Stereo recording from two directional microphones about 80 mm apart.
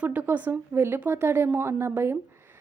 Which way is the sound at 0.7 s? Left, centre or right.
Right.